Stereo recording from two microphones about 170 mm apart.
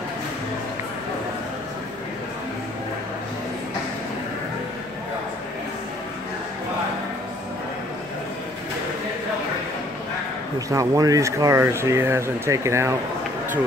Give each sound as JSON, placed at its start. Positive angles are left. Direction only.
{"t": 10.7, "sound": "speech", "side_deg": -20}